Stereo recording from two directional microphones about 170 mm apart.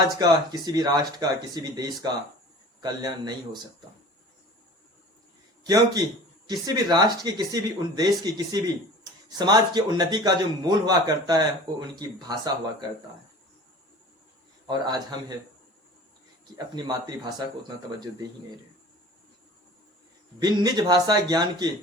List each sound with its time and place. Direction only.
0.2 s speech: 20° right (ahead or behind)
5.6 s speech: 20° right (ahead or behind)
14.7 s speech: 25° right (ahead or behind)
16.6 s speech: 25° right (ahead or behind)
20.4 s speech: 25° right (ahead or behind)